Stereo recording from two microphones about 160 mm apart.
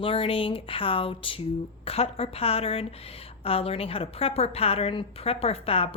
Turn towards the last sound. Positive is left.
turn(degrees=35)  # may be behind; listen again after turning